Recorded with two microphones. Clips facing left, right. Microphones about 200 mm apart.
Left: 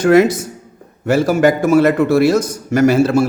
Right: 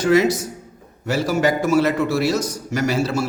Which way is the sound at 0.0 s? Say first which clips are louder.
Left 5 dB; 55° left (ahead or behind).